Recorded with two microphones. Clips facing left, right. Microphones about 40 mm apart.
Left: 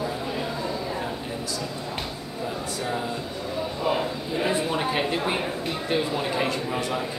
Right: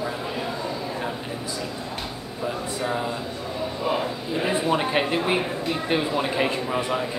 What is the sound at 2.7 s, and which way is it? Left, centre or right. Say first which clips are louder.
Speech: right 2 dB; centre.